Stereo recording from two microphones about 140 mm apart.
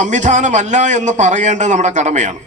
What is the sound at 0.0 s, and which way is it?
A man's voice, 60° right (ahead or behind).